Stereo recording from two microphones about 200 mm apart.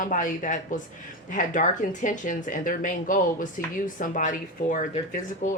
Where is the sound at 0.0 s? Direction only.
40° left (ahead or behind).